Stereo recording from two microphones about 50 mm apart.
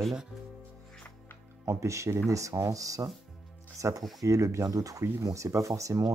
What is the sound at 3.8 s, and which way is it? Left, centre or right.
Speech, right.